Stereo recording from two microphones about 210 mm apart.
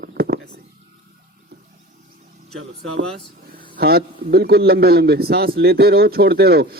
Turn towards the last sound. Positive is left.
turn(degrees=-50)  # may be behind; listen again after turning